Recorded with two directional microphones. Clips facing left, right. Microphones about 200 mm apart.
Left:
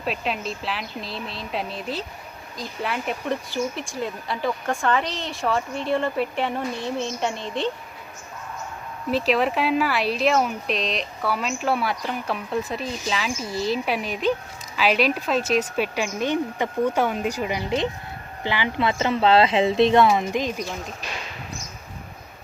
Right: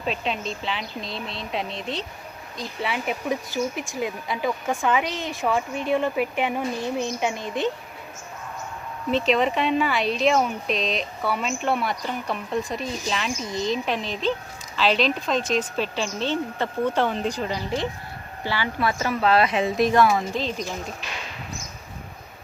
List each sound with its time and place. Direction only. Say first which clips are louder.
0.0 s speech: even; 5° left (ahead or behind)
9.0 s speech: even; 5° left (ahead or behind)